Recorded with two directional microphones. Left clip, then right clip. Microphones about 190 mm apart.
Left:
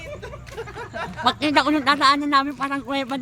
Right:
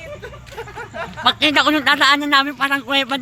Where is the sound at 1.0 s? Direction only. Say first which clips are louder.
Right 5 dB; 5° left (ahead or behind).